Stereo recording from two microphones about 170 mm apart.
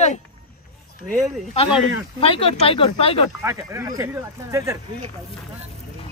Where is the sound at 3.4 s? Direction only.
15° right (ahead or behind).